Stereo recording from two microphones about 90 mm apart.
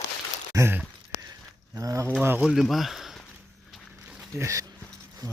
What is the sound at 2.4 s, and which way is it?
Speech, 5° right (ahead or behind).